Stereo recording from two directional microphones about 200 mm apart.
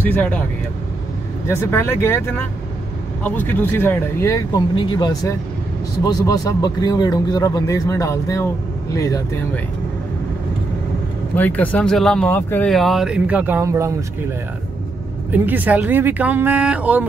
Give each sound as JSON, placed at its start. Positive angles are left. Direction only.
{"t": 0.0, "sound": "speech", "side_deg": 10}
{"t": 1.5, "sound": "speech", "side_deg": 10}
{"t": 11.3, "sound": "speech", "side_deg": 10}
{"t": 15.3, "sound": "speech", "side_deg": -10}